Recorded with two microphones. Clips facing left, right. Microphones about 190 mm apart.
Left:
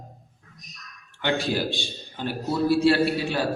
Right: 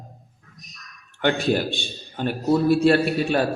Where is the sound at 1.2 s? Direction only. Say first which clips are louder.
Right 4 dB; 55° right (ahead or behind).